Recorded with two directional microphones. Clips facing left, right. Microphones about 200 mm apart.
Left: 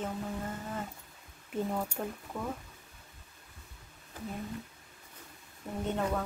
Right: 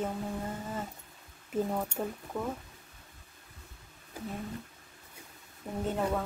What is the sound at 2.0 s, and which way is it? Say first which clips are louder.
Speech: right 2 dB; 5° right (ahead or behind).